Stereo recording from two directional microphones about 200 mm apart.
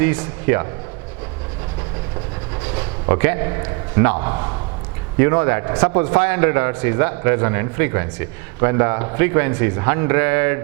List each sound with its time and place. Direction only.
0.0 s a man's voice: 10° right (ahead or behind)
2.7 s a man's voice: 15° right (ahead or behind)